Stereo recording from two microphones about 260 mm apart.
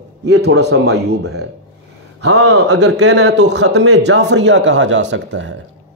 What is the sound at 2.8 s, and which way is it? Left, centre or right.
Speech, right.